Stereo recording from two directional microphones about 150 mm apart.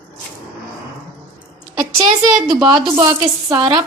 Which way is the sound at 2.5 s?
25° right (ahead or behind).